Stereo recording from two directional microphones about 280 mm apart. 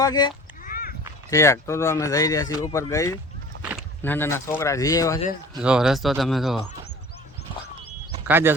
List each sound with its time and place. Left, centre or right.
0.0 s speech: centre
0.6 s a sound: left
1.3 s speech: centre
5.6 s speech: centre
8.3 s speech: centre